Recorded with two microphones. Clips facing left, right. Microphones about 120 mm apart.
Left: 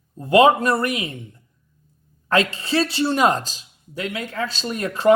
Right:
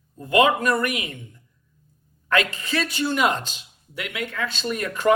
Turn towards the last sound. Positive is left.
turn(degrees=30)  # may be behind; listen again after turning